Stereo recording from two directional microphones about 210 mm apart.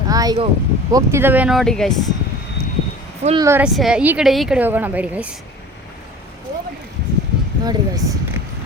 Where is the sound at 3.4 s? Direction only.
10° right (ahead or behind).